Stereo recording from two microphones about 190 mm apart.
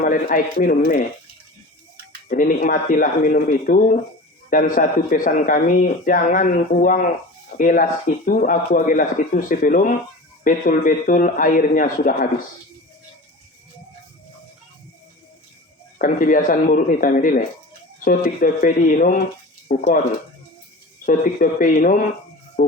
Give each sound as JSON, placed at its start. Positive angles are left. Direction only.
{"t": 0.0, "sound": "speech", "side_deg": 45}
{"t": 2.3, "sound": "speech", "side_deg": 45}
{"t": 16.0, "sound": "speech", "side_deg": 45}
{"t": 21.0, "sound": "speech", "side_deg": 45}